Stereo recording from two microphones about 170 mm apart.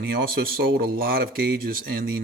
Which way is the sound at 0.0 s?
60° right (ahead or behind).